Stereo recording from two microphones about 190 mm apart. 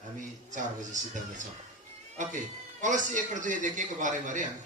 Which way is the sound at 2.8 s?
40° right (ahead or behind).